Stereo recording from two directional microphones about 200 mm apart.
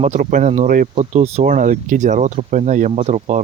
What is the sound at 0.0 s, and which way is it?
Speech, 35° right (ahead or behind).